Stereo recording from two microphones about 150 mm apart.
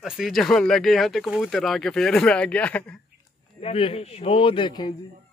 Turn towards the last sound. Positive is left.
turn(degrees=25)  # may be behind; listen again after turning